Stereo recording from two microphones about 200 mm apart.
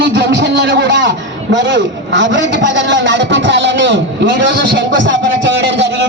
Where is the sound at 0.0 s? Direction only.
65° right (ahead or behind).